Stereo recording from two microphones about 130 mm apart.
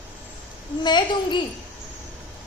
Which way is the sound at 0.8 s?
35° left (ahead or behind).